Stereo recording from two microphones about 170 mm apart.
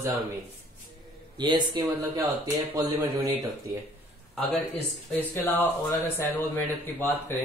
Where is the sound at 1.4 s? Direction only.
25° right (ahead or behind).